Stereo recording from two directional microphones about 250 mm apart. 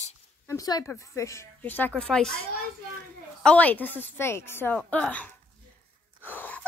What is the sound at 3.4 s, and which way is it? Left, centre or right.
A woman's voice, centre.